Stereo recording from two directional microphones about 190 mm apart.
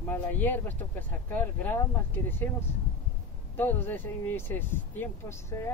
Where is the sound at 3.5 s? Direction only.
10° left (ahead or behind).